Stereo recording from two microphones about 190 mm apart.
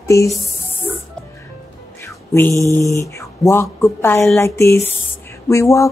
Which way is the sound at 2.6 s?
15° left (ahead or behind).